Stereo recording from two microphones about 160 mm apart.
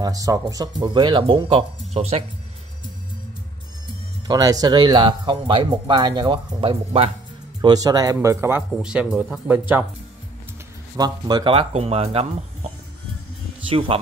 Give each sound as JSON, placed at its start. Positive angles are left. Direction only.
{"t": 0.0, "sound": "speech", "side_deg": -20}
{"t": 4.3, "sound": "speech", "side_deg": -25}
{"t": 7.6, "sound": "speech", "side_deg": -25}
{"t": 11.0, "sound": "speech", "side_deg": -25}
{"t": 13.7, "sound": "speech", "side_deg": -35}